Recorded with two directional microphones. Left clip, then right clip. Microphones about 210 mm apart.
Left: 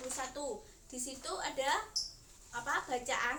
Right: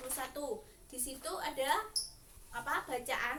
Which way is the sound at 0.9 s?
5° right (ahead or behind).